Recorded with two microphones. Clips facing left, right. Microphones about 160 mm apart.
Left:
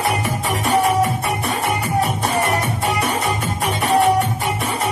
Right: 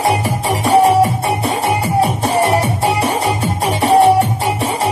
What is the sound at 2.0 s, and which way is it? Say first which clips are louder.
Music: right 6 dB; 30° right (ahead or behind).